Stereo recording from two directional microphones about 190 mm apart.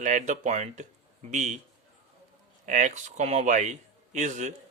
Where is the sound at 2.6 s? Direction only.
40° right (ahead or behind).